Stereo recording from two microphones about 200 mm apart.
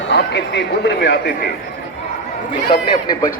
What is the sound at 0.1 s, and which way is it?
Speech, 60° left (ahead or behind).